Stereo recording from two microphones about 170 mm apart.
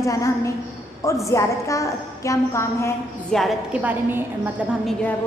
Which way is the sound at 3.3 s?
5° right (ahead or behind).